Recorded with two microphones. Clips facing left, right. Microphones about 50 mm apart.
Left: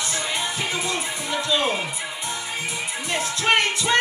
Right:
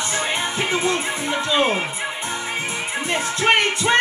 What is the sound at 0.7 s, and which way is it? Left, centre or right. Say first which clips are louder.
Music: right 6 dB; right.